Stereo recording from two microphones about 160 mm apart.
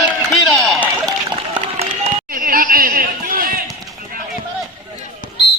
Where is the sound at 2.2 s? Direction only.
65° right (ahead or behind).